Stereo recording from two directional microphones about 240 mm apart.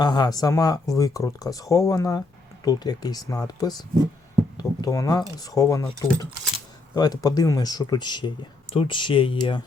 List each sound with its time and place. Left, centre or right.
0.0 s speech: centre